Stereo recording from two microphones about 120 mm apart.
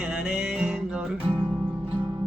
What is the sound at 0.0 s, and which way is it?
Music, 5° right (ahead or behind).